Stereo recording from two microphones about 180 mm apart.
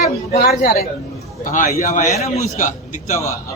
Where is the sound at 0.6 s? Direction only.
55° left (ahead or behind).